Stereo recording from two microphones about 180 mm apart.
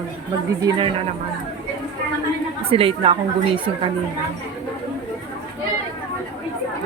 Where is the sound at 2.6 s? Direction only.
30° right (ahead or behind).